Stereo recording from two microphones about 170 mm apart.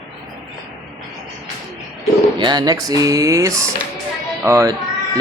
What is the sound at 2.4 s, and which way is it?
Speech, 25° right (ahead or behind).